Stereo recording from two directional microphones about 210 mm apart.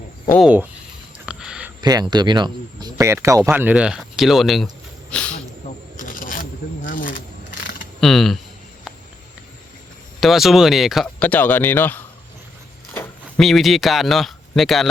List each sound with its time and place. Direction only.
0.4 s speech: 10° right (ahead or behind)
1.2 s a sound: 5° right (ahead or behind)
1.8 s speech: 20° right (ahead or behind); by 4.7 s centre (ahead or behind)
5.1 s snake: 5° left (ahead or behind)
5.7 s shuffling cards: 35° left (ahead or behind)
6.8 s a sound: 40° left (ahead or behind)
8.0 s speech: centre (ahead or behind)
10.2 s speech: centre (ahead or behind)